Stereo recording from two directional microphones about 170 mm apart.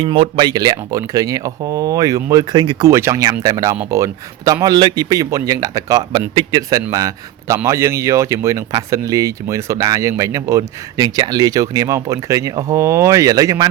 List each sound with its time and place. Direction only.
0.0 s a man's voice: 30° right (ahead or behind)